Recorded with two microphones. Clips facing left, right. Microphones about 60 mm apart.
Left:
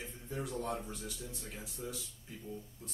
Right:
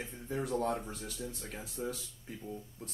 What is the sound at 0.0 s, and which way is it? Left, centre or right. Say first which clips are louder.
Speech: right 4 dB; right.